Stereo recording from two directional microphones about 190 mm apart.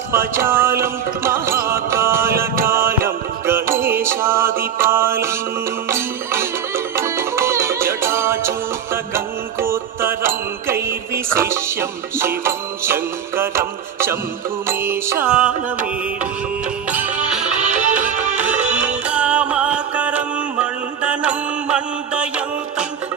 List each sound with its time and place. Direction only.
0.1 s music: 15° right (ahead or behind)
16.9 s music: 10° right (ahead or behind)
17.7 s music: 40° right (ahead or behind)
18.3 s music: 10° right (ahead or behind)